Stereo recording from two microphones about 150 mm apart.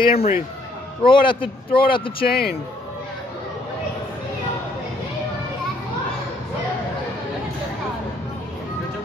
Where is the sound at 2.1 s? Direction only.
90° left.